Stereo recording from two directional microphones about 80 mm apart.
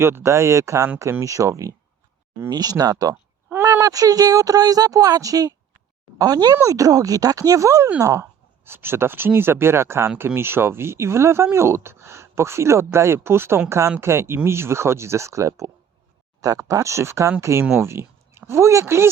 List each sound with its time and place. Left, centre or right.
0.0 s speech: right
2.5 s speech: right
3.5 s speech: right